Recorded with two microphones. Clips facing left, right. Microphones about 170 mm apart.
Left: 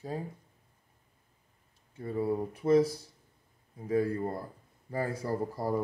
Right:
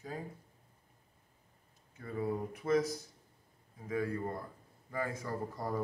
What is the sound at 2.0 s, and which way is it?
Speech, 30° left (ahead or behind).